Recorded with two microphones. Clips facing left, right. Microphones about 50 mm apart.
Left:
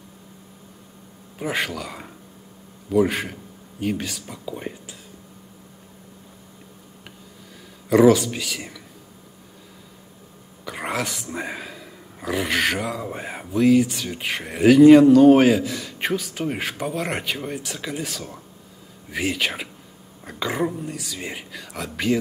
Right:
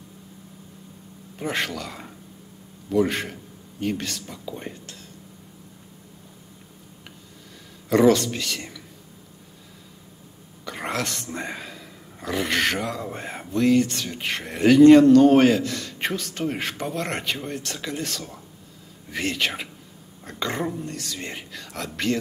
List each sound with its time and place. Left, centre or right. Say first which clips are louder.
1.4 s speech: left 1 dB; centre
7.9 s speech: left 3 dB; centre
10.6 s a sound: left 1 dB; centre
11.3 s speech: left 2 dB; centre